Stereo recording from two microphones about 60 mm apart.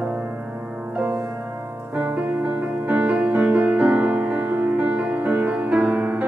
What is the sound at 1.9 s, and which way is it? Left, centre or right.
Music, right.